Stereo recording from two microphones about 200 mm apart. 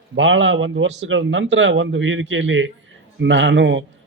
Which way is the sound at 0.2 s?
70° right (ahead or behind).